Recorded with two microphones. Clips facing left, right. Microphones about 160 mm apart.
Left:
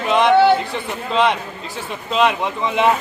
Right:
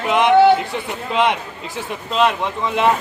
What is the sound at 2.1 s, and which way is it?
Speech, centre (ahead or behind).